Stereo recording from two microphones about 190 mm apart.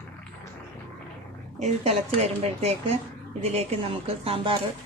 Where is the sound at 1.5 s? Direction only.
35° right (ahead or behind).